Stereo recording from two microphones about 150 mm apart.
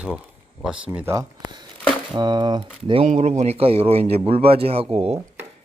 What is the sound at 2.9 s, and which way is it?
A man's voice, 45° right (ahead or behind).